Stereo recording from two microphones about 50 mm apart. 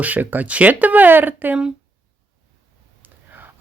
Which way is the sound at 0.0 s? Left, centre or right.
Right.